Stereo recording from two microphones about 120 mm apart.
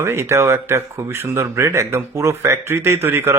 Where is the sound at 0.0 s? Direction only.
20° right (ahead or behind).